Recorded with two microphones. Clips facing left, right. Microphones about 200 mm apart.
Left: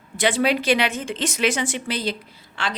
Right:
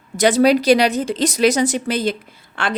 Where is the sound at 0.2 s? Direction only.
40° right (ahead or behind).